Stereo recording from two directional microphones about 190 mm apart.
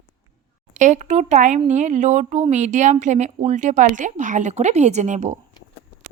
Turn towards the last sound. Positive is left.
turn(degrees=-40)  # may be behind; listen again after turning